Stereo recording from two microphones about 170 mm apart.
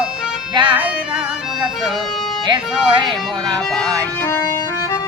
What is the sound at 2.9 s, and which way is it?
Speech, 30° right (ahead or behind).